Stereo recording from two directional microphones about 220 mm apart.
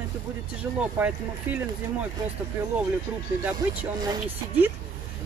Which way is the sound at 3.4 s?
10° right (ahead or behind).